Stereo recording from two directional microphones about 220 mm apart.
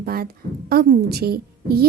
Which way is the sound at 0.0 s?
45° right (ahead or behind).